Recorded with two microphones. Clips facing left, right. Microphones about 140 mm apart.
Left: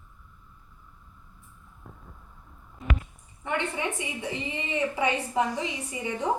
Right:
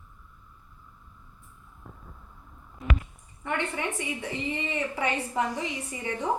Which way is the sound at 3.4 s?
20° left (ahead or behind).